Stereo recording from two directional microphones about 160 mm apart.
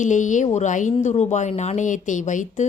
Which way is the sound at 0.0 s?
50° left (ahead or behind).